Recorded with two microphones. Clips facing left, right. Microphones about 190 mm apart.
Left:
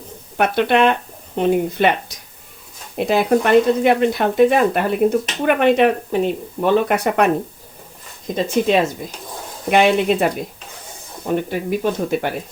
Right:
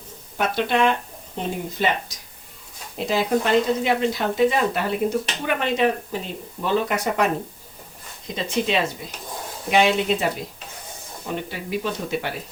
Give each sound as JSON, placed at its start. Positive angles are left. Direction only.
{"t": 0.3, "sound": "speech", "side_deg": 65}
{"t": 8.4, "sound": "speech", "side_deg": 45}